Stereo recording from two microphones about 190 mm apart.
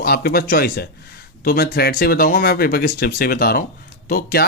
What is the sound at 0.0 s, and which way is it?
Speech, 55° left (ahead or behind).